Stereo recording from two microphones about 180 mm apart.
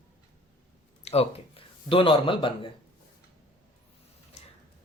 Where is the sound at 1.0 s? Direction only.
35° left (ahead or behind).